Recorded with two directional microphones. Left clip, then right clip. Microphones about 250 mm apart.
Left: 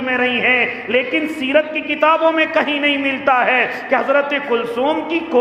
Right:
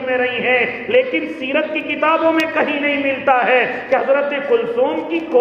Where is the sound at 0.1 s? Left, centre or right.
Left.